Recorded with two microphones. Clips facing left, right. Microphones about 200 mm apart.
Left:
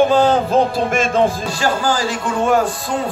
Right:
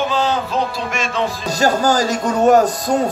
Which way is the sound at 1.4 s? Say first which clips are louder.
Right 3 dB; 40° right (ahead or behind).